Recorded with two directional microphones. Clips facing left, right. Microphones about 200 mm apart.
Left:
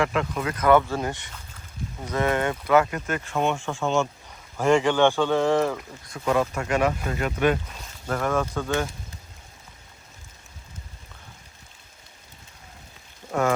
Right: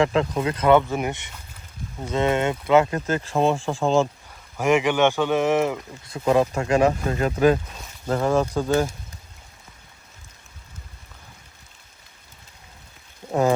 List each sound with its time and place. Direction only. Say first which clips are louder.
0.0 s speech: right 4 dB; 30° right (ahead or behind)
4.6 s speech: even; 15° right (ahead or behind)
6.1 s speech: right 4 dB; 30° right (ahead or behind)